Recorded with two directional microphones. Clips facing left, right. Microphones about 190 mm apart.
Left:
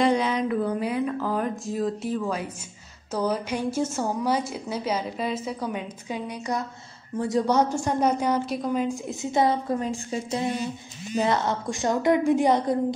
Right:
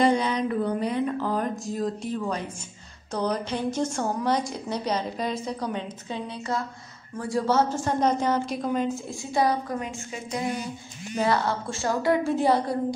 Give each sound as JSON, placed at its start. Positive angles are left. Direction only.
{"t": 0.0, "sound": "music", "side_deg": 0}
{"t": 3.1, "sound": "a woman's voice", "side_deg": 5}
{"t": 8.9, "sound": "a woman's voice", "side_deg": 20}